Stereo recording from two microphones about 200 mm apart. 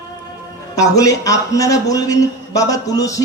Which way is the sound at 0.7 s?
15° left (ahead or behind).